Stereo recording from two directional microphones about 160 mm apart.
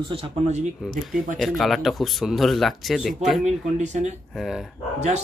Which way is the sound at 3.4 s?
45° right (ahead or behind).